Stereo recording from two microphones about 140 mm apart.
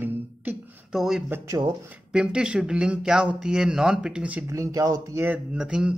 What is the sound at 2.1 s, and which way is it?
Speech, 5° right (ahead or behind).